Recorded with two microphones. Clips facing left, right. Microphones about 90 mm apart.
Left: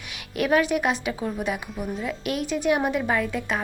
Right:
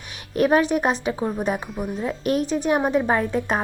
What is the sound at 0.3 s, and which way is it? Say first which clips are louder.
A woman's voice: right 3 dB; 35° right (ahead or behind).